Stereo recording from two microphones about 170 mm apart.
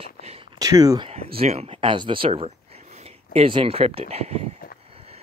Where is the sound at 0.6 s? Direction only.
20° right (ahead or behind).